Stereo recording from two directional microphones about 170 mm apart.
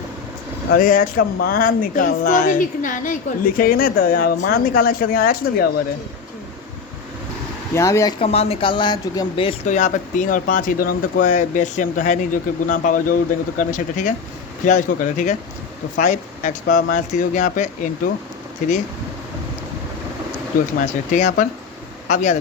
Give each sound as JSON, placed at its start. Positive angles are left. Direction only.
{"t": 0.8, "sound": "speech", "side_deg": 55}
{"t": 7.7, "sound": "speech", "side_deg": 15}
{"t": 8.2, "sound": "speech", "side_deg": 35}
{"t": 9.6, "sound": "speech", "side_deg": 45}
{"t": 21.1, "sound": "speech", "side_deg": 45}